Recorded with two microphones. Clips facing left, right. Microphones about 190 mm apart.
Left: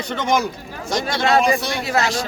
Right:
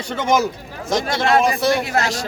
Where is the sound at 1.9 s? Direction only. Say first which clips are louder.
Left 1 dB; 40° right (ahead or behind).